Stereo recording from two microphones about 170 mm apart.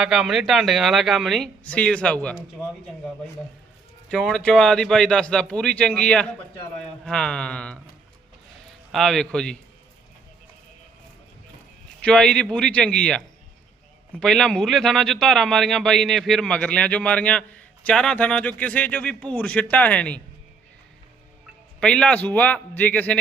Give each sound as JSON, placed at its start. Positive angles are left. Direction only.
{"t": 0.0, "sound": "speech", "side_deg": 0}
{"t": 4.1, "sound": "speech", "side_deg": 0}
{"t": 8.9, "sound": "speech", "side_deg": 0}
{"t": 12.0, "sound": "speech", "side_deg": 5}
{"t": 21.8, "sound": "speech", "side_deg": 5}